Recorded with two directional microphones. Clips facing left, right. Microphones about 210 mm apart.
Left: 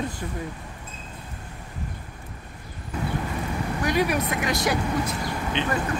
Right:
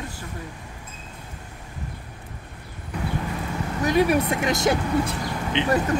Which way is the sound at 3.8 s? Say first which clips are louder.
Right 4 dB; 25° right (ahead or behind).